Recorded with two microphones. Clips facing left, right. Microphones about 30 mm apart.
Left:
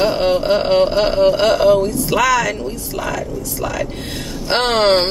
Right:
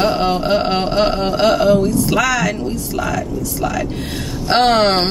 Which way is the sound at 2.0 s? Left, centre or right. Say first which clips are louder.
Left 1 dB; centre.